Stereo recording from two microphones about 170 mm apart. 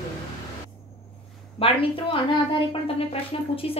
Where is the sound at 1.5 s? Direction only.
35° left (ahead or behind).